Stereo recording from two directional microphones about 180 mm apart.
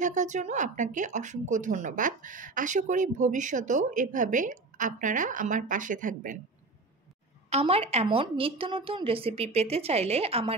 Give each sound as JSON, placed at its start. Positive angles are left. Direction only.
{"t": 0.0, "sound": "speech", "side_deg": -45}
{"t": 7.4, "sound": "a woman's voice", "side_deg": -35}